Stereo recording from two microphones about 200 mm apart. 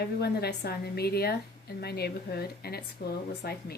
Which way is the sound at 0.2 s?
55° left (ahead or behind).